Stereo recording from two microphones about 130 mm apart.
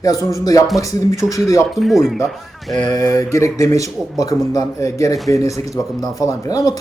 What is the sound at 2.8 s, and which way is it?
Speech, 30° left (ahead or behind).